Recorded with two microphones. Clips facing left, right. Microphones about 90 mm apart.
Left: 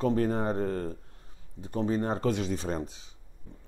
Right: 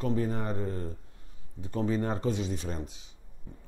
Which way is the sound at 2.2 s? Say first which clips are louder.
Left 2 dB; 55° left (ahead or behind).